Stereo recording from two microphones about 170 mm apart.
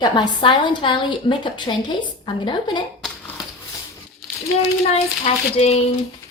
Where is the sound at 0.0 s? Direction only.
25° left (ahead or behind).